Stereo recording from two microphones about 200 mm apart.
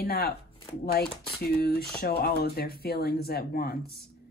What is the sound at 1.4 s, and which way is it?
Speech, 50° left (ahead or behind).